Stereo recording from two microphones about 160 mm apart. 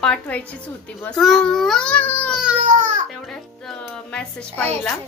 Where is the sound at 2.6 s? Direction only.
50° right (ahead or behind).